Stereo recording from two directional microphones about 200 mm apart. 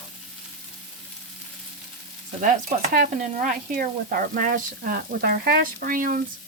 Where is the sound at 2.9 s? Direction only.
40° right (ahead or behind).